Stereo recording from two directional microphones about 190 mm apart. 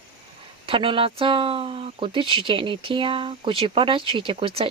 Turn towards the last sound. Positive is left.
turn(degrees=-30)  # may be behind; listen again after turning